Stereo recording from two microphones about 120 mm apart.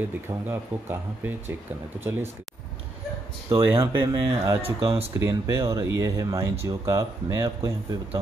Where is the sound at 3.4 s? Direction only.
30° right (ahead or behind).